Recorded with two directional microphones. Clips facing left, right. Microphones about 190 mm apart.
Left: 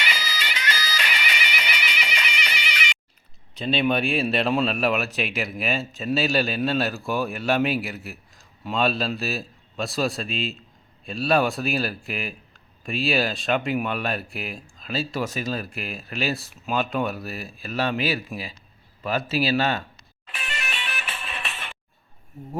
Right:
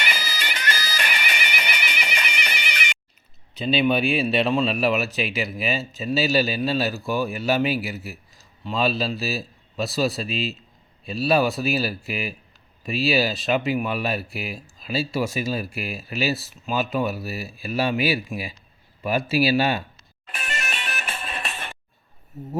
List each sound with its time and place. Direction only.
0.0 s music: 50° right (ahead or behind)
3.5 s speech: centre (ahead or behind)
20.3 s music: 45° right (ahead or behind)